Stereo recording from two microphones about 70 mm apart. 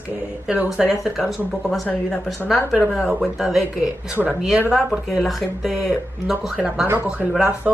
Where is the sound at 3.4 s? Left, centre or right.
Centre.